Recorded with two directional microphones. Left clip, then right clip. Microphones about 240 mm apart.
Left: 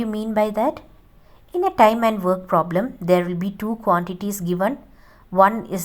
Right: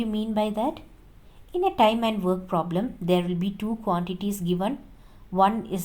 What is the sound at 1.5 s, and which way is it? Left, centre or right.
A woman's voice, left.